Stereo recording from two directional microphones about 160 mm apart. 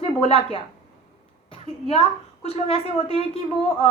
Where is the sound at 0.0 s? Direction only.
35° left (ahead or behind).